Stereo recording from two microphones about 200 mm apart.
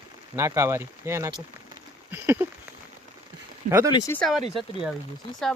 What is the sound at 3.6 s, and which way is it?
Speech, 15° right (ahead or behind).